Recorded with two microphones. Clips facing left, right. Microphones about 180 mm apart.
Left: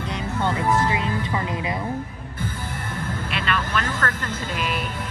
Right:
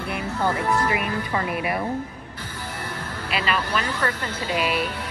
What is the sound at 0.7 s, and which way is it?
Speech, 25° left (ahead or behind).